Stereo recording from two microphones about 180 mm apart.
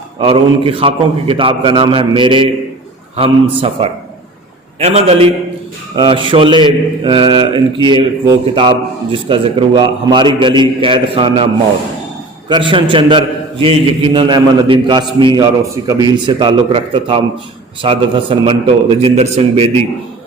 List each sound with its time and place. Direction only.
0.2 s a man's voice: 30° right (ahead or behind)
12.5 s a man's voice: 25° right (ahead or behind)